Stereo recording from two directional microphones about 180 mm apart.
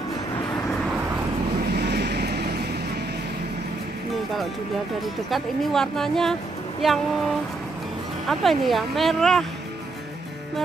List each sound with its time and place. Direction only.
1.7 s vehicle: 65° right (ahead or behind)
5.3 s speech: centre (ahead or behind)